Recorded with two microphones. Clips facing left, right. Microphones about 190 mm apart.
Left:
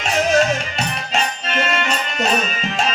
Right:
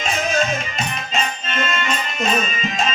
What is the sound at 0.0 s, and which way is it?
Music, 70° left (ahead or behind).